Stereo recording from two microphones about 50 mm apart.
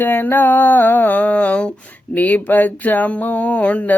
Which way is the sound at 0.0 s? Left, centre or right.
Left.